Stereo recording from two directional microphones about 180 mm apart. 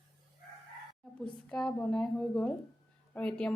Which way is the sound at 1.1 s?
5° left (ahead or behind).